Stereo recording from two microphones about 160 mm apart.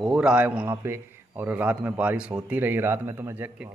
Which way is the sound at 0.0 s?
5° right (ahead or behind).